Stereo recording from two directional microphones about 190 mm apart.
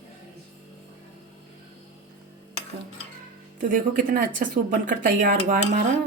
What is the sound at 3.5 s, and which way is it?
Speech, 45° right (ahead or behind).